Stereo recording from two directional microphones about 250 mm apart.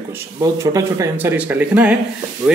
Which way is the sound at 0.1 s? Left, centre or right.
Centre.